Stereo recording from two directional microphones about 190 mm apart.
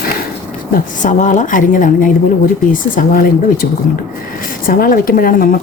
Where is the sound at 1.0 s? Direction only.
40° left (ahead or behind).